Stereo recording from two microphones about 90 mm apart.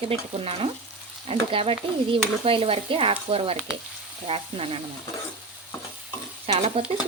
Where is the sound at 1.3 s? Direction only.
90° right.